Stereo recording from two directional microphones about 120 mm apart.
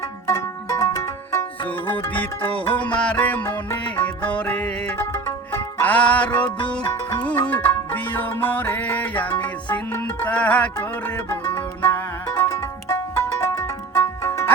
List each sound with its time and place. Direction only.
0.3 s music: 25° left (ahead or behind)
1.6 s music: 15° left (ahead or behind)